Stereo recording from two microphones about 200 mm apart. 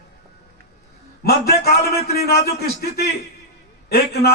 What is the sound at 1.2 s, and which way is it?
Speech, 50° left (ahead or behind).